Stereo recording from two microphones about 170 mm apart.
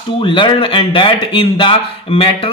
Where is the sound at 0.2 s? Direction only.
30° left (ahead or behind).